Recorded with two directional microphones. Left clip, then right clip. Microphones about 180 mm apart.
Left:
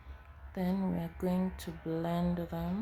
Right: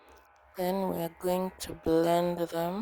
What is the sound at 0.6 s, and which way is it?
Speech, 60° right (ahead or behind).